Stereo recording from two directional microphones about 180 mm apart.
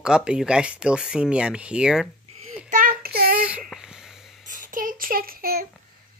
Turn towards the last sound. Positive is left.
turn(degrees=-55)  # may be behind; listen again after turning